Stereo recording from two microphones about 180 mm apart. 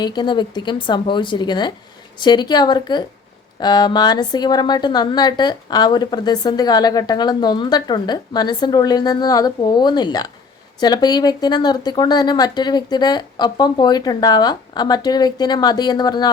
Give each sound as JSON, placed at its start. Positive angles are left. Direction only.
{"t": 0.0, "sound": "a woman's voice", "side_deg": 25}